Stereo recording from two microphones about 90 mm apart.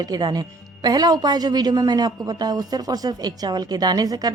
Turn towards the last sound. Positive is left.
turn(degrees=-45)  # may be behind; listen again after turning